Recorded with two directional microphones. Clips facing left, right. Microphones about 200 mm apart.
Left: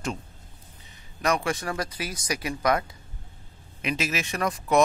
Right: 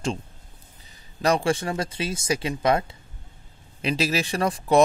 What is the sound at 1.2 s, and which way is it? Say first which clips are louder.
Speech: right 4 dB; 30° right (ahead or behind).